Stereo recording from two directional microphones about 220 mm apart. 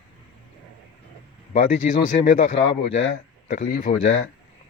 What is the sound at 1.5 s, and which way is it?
Speech, 40° left (ahead or behind).